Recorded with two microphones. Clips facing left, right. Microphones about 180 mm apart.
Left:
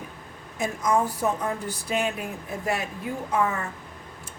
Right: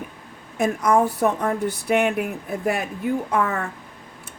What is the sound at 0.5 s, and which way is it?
Speech, 60° right (ahead or behind).